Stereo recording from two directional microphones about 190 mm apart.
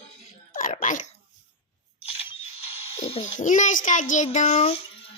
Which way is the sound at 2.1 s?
30° left (ahead or behind).